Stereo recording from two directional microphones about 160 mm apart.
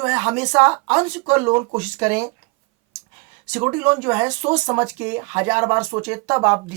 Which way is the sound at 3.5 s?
15° right (ahead or behind).